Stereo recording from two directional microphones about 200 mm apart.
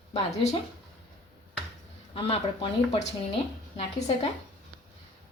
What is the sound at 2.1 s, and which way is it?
Speech, 25° left (ahead or behind).